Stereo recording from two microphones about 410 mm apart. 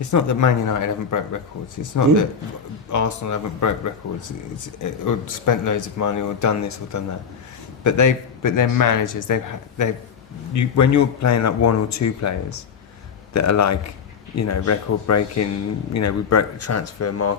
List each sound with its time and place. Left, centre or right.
0.0 s speech: left